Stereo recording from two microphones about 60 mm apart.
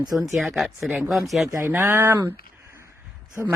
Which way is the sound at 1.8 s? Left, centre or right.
Right.